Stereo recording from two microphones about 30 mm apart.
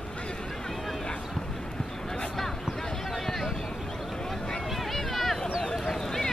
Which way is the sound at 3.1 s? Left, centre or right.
Centre.